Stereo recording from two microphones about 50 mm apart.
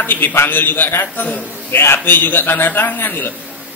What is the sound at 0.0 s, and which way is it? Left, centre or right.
A man's voice, left.